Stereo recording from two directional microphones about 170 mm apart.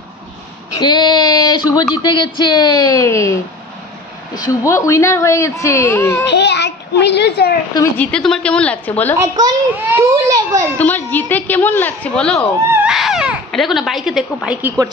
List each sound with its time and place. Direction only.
0.7 s speech: 25° left (ahead or behind)
4.5 s speech: 20° left (ahead or behind)
6.2 s a child's voice: 90° left
8.0 s speech: 5° left (ahead or behind)
9.2 s a child's voice: 20° right (ahead or behind)
10.8 s speech: 10° left (ahead or behind)
12.7 s speech: 5° right (ahead or behind)